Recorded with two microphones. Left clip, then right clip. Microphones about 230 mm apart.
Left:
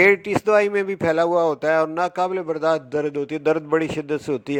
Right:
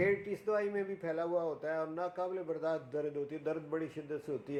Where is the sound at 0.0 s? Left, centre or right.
Left.